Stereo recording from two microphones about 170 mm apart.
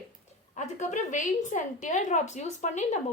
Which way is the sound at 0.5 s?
45° left (ahead or behind).